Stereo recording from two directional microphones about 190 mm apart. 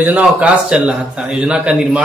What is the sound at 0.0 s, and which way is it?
A man's voice, 5° right (ahead or behind).